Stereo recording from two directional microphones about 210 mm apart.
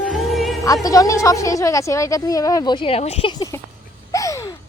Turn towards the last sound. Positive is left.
turn(degrees=20)  # may be behind; listen again after turning